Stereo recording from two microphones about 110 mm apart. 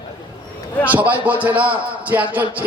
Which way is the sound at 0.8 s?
15° right (ahead or behind).